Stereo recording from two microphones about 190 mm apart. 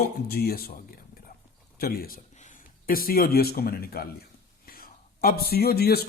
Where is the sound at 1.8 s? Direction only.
50° left (ahead or behind).